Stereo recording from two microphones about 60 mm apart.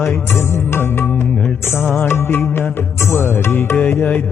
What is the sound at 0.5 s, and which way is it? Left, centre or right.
Music, left.